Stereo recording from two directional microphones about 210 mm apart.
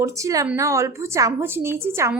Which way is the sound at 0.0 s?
15° right (ahead or behind).